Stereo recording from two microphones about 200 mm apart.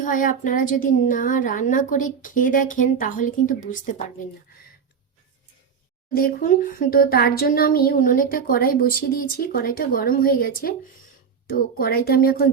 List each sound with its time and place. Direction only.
0.0 s a woman's voice: 40° left (ahead or behind)
6.1 s speech: 45° left (ahead or behind)